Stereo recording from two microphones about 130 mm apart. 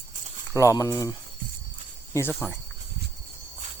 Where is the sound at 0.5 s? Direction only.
25° left (ahead or behind).